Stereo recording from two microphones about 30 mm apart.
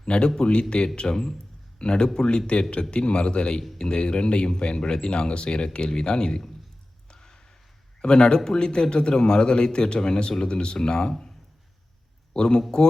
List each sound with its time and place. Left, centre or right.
0.0 s speech: left
1.0 s a man's voice: centre
1.8 s a man's voice: left
7.1 s a sound: left
8.0 s a man's voice: left
12.3 s a man's voice: left